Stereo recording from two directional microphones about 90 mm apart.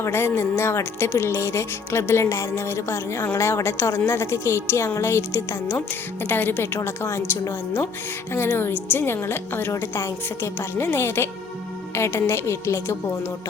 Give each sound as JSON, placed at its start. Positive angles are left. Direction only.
{"t": 0.0, "sound": "a woman's voice", "side_deg": 30}